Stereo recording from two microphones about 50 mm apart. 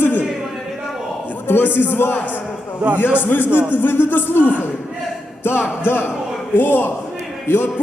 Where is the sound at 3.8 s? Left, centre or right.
Left.